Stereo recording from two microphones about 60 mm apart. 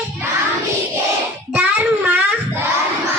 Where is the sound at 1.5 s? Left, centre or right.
Right.